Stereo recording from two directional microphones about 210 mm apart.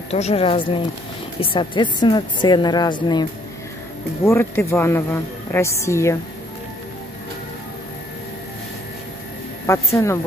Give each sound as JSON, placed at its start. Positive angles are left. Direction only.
{"t": 0.1, "sound": "a woman's voice", "side_deg": 30}
{"t": 9.7, "sound": "a woman's voice", "side_deg": 15}